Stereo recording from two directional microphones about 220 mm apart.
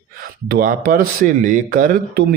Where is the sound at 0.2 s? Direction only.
40° right (ahead or behind).